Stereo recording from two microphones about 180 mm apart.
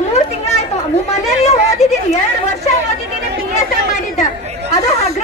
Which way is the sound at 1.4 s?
40° left (ahead or behind).